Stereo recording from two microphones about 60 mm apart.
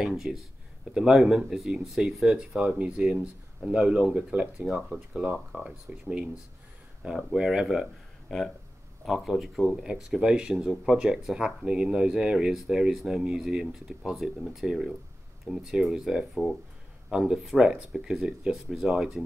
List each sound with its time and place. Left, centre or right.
0.0 s speech: centre
8.3 s speech: centre
17.9 s speech: centre